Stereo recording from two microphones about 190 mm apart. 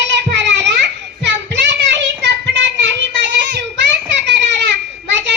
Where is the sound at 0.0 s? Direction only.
65° right (ahead or behind).